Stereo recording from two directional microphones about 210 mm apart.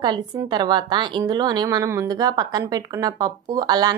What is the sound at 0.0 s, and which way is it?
A woman's voice, 20° right (ahead or behind).